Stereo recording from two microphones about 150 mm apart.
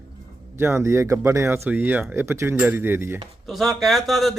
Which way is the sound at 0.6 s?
15° right (ahead or behind).